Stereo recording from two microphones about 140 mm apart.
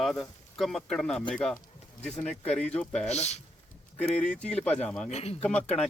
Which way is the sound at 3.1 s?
55° left (ahead or behind).